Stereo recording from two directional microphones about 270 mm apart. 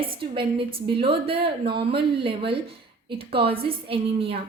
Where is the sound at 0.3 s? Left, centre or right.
Centre.